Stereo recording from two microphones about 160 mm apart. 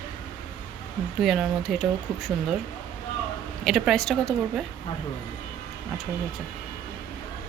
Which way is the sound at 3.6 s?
Centre (ahead or behind).